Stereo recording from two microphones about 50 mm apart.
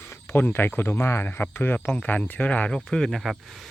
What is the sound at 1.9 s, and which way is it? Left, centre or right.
Speech, left.